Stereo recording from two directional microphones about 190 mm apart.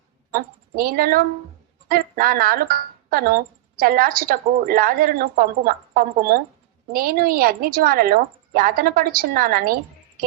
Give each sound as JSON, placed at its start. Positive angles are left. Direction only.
{"t": 0.3, "sound": "a woman's voice", "side_deg": -50}